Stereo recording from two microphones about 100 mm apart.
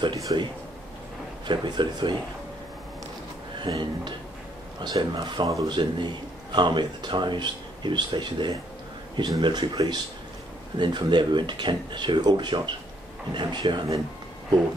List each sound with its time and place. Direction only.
0.1 s speech: 40° right (ahead or behind)
1.4 s speech: 50° right (ahead or behind)
3.5 s speech: 50° right (ahead or behind)